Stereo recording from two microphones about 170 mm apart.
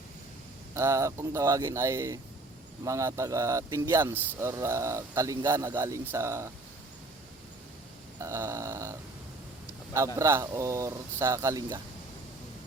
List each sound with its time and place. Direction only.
0.7 s speech: 15° right (ahead or behind)
8.2 s speech: 20° right (ahead or behind)
10.2 s speech: 15° right (ahead or behind)